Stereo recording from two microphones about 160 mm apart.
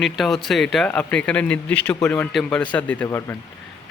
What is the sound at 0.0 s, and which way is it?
A man's voice, centre (ahead or behind).